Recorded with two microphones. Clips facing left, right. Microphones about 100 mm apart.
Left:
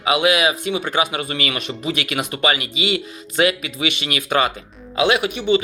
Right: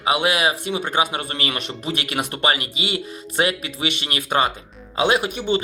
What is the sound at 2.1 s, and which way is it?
Speech, 40° right (ahead or behind).